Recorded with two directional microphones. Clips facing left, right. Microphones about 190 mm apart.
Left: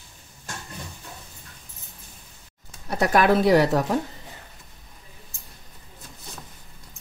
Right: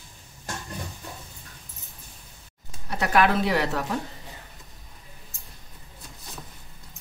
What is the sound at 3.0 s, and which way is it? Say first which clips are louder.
Speech: left 3 dB; 40° left (ahead or behind).